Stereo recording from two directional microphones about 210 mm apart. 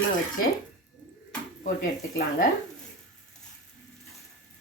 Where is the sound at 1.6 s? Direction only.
40° left (ahead or behind).